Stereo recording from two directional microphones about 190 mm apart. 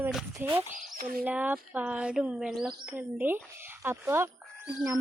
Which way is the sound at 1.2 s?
5° right (ahead or behind).